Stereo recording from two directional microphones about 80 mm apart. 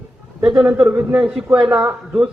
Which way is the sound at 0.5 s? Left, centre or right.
Right.